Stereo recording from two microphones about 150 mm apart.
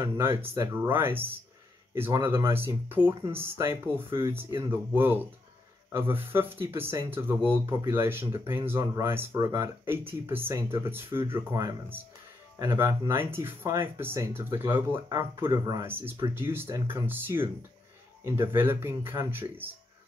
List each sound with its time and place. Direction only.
0.0 s speech: 15° right (ahead or behind)